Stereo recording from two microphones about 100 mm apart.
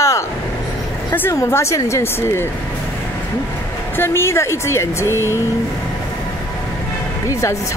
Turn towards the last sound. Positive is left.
turn(degrees=30)  # may be behind; listen again after turning